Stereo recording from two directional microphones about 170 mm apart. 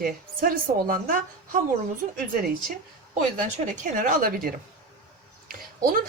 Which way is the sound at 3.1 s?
45° right (ahead or behind).